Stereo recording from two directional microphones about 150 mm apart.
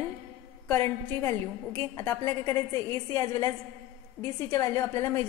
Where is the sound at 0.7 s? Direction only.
10° left (ahead or behind).